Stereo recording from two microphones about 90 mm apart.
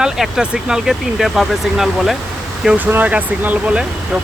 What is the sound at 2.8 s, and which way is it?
Speech, 20° right (ahead or behind).